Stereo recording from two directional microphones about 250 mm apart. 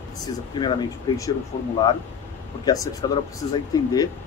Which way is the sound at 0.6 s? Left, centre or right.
Centre.